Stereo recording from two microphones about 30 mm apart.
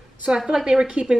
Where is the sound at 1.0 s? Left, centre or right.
Centre.